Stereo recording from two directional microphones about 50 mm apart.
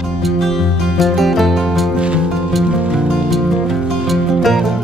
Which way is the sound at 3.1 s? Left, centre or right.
Centre.